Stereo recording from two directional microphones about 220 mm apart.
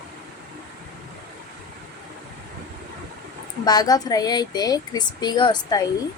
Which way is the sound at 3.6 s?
20° left (ahead or behind).